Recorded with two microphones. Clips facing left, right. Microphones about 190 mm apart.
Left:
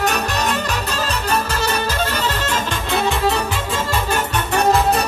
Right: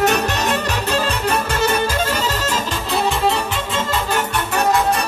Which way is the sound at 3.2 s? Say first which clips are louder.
Even; 25° right (ahead or behind).